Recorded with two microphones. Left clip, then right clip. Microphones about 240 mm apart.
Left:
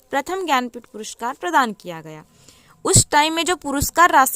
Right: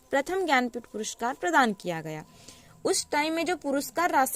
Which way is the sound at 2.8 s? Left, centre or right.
Left.